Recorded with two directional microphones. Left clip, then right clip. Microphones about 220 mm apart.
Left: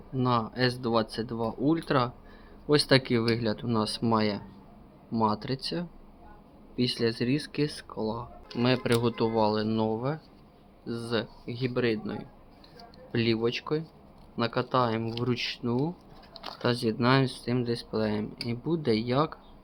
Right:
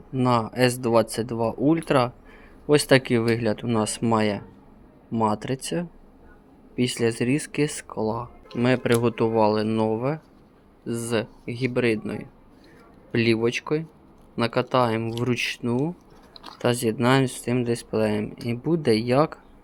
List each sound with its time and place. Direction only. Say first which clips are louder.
0.2 s speech: right 6 dB; 25° right (ahead or behind)
6.7 s speech: right 4 dB; 25° right (ahead or behind)
16.3 s a sound: left 1 dB; 30° left (ahead or behind)
16.8 s speech: right 3 dB; 20° right (ahead or behind)